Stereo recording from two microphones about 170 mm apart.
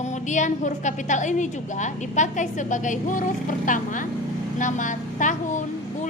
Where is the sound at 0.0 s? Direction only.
45° left (ahead or behind).